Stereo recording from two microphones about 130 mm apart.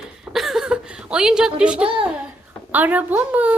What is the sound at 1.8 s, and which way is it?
Speech, 45° right (ahead or behind).